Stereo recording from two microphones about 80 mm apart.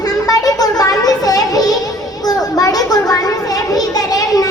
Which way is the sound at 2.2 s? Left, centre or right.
Left.